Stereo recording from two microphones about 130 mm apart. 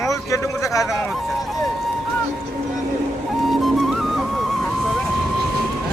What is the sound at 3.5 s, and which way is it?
Music, centre (ahead or behind).